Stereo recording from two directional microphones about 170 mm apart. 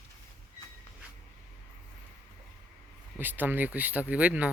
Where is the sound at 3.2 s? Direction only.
10° right (ahead or behind).